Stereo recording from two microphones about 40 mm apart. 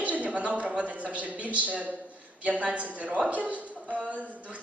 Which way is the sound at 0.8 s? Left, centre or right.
Right.